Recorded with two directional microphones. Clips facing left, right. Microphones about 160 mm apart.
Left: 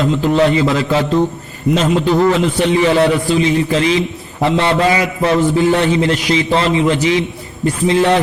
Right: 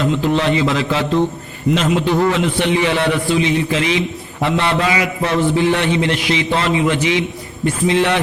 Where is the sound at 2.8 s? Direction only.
40° left (ahead or behind).